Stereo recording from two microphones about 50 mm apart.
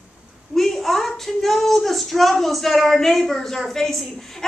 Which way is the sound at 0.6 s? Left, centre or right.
Centre.